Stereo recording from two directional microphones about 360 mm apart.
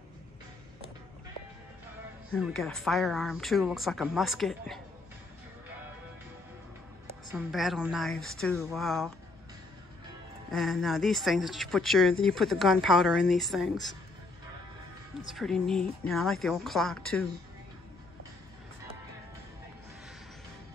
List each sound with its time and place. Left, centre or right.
2.3 s speech: centre
7.3 s speech: centre
10.5 s speech: centre
15.2 s speech: centre